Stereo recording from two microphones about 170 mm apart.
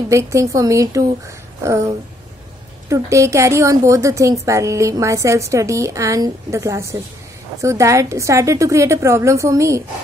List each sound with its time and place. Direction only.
0.1 s a woman's voice: 15° right (ahead or behind)